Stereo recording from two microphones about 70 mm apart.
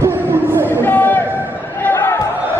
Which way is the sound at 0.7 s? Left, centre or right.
Left.